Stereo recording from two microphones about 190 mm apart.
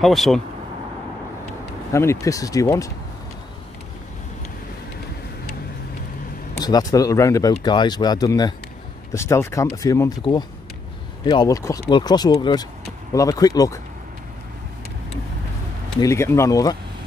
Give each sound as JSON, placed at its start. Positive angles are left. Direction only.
{"t": 0.0, "sound": "speech", "side_deg": 0}
{"t": 1.9, "sound": "speech", "side_deg": 15}
{"t": 6.6, "sound": "speech", "side_deg": 20}
{"t": 16.0, "sound": "speech", "side_deg": 15}